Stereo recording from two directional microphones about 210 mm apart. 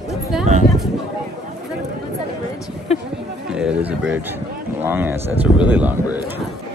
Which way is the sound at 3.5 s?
5° right (ahead or behind).